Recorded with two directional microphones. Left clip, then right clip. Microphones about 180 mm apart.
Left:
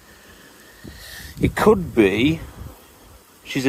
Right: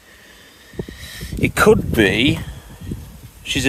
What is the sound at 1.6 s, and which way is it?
Speech, 20° right (ahead or behind).